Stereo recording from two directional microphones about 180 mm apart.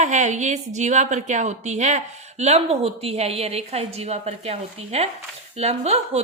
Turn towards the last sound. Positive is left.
turn(degrees=-35)  # may be behind; listen again after turning